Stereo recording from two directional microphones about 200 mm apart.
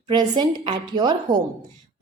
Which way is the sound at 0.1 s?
25° right (ahead or behind).